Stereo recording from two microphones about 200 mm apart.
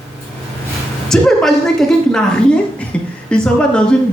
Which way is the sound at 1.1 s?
Centre (ahead or behind).